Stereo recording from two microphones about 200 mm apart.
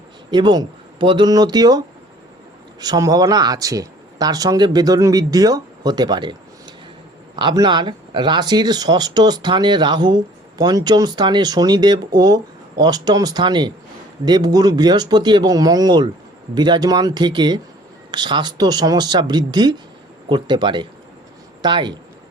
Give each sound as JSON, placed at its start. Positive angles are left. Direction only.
{"t": 0.3, "sound": "speech", "side_deg": -20}
{"t": 2.8, "sound": "speech", "side_deg": -20}
{"t": 7.3, "sound": "speech", "side_deg": -20}